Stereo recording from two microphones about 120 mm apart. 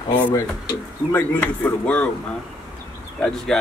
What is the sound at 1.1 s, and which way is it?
Speech, 15° left (ahead or behind).